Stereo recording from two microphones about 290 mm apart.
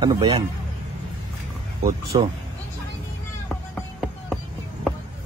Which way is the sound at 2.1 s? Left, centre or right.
Centre.